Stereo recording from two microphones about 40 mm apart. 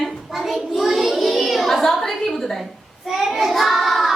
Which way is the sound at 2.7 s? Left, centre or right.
Centre.